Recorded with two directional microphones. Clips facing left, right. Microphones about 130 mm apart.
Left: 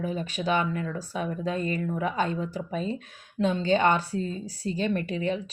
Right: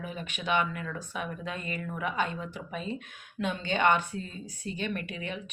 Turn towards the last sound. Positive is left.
turn(degrees=35)  # may be behind; listen again after turning